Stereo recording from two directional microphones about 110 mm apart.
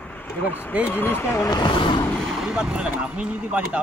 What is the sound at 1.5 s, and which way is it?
Speech, 40° left (ahead or behind).